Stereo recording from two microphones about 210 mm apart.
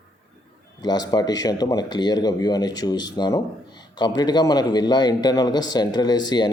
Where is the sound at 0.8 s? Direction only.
20° left (ahead or behind).